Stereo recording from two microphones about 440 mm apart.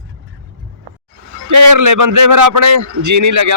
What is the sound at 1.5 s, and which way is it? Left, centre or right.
Speech, right.